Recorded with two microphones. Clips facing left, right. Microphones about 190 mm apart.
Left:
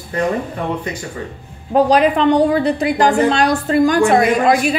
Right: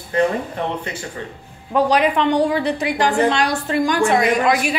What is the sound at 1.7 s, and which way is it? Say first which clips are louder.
A woman's voice: left 4 dB; 35° left (ahead or behind).